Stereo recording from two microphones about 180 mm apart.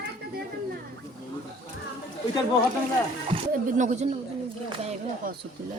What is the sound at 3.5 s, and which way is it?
Speech, 45° right (ahead or behind).